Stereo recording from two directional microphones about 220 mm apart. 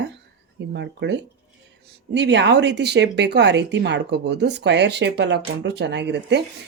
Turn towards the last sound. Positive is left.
turn(degrees=-50)  # may be behind; listen again after turning